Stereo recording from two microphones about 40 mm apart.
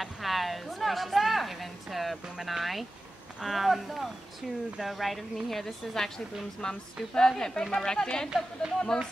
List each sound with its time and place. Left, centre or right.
0.0 s a woman's voice: centre